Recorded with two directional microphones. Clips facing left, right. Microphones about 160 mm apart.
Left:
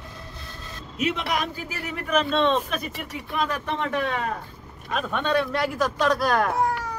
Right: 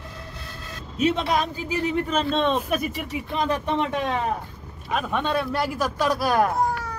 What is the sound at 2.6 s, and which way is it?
Speech, 5° right (ahead or behind).